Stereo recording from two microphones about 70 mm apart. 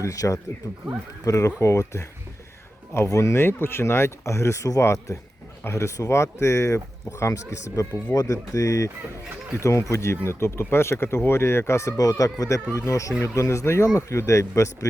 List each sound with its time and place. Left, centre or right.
0.0 s speech: left
3.4 s speech: left
8.1 s speech: left